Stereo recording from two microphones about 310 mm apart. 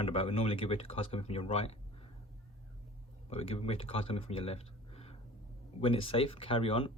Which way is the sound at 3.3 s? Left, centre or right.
Centre.